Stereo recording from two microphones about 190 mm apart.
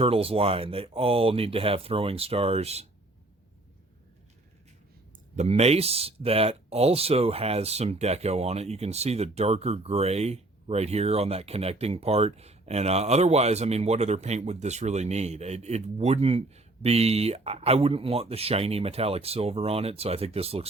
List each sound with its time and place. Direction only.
0.0 s speech: 30° right (ahead or behind)
5.4 s speech: 35° right (ahead or behind)